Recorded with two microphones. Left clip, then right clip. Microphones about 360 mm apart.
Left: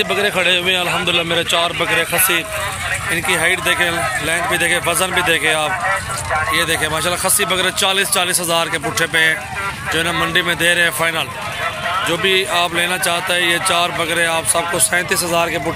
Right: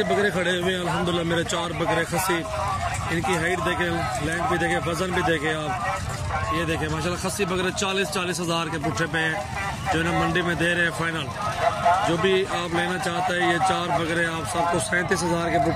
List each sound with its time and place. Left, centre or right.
0.1 s speech: left
1.3 s speech: centre
1.8 s speech: left
3.3 s speech: centre
6.7 s speech: centre
12.2 s speech: centre